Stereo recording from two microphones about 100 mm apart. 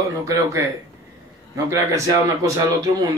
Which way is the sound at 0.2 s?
30° right (ahead or behind).